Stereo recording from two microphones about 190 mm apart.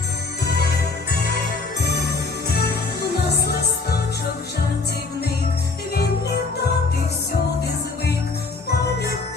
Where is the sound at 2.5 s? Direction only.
60° left (ahead or behind).